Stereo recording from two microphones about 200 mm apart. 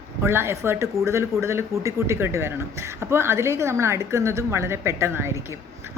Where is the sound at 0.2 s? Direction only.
10° right (ahead or behind).